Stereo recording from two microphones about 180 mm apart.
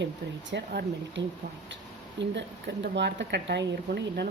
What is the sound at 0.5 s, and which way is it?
Speech, 65° right (ahead or behind).